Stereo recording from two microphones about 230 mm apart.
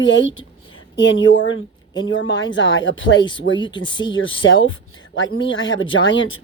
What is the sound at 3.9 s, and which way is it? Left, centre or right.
Speech, centre.